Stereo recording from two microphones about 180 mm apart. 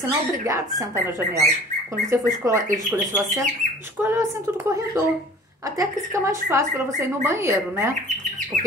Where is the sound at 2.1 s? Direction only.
15° right (ahead or behind).